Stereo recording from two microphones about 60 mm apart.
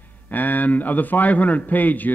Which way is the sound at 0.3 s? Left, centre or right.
Left.